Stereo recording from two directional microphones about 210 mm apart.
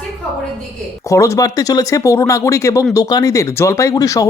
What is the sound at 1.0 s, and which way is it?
Speech, 15° left (ahead or behind).